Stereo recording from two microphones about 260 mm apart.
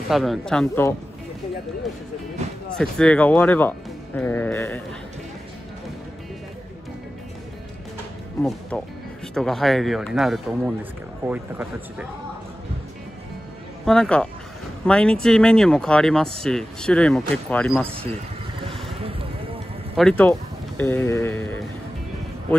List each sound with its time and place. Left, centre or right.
0.1 s speech: centre
2.7 s speech: centre
8.4 s speech: centre
13.8 s speech: centre
18.9 s music: right
20.0 s speech: centre